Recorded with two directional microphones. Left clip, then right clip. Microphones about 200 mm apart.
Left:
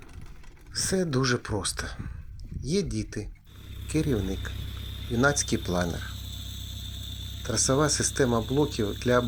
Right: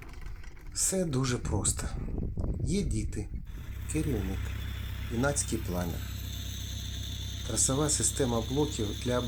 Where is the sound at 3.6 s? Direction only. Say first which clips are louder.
Left 5 dB; 60° left (ahead or behind).